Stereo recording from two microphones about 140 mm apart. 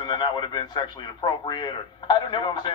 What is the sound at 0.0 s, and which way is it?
A man's voice, 30° left (ahead or behind).